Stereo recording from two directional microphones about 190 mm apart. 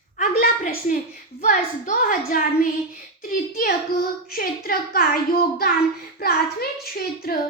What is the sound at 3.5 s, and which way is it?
A child's voice, 50° left (ahead or behind).